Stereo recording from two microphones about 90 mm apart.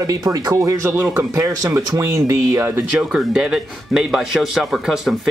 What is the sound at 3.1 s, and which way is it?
Speech, 10° right (ahead or behind).